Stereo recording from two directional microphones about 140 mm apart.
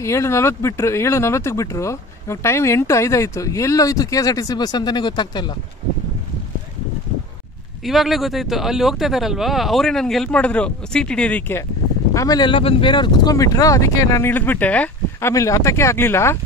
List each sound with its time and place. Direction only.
0.0 s speech: 20° left (ahead or behind)
7.8 s speech: centre (ahead or behind)
12.1 s speech: 25° left (ahead or behind)